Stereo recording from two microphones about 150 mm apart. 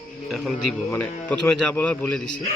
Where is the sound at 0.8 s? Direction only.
10° left (ahead or behind).